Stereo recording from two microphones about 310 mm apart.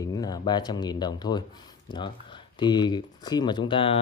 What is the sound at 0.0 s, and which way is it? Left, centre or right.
Speech, centre.